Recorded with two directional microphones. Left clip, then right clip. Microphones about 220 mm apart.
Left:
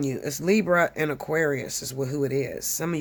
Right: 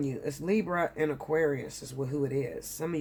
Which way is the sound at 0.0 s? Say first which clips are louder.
Left 6 dB; 40° left (ahead or behind).